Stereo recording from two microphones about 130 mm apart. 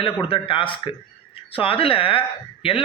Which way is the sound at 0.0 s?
45° left (ahead or behind).